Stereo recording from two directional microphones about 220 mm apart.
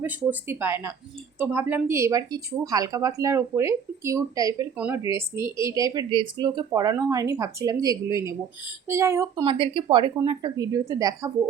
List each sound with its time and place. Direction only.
0.0 s speech: 10° right (ahead or behind)